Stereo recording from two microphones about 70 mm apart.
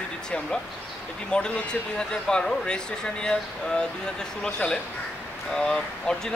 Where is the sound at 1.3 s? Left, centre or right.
Centre.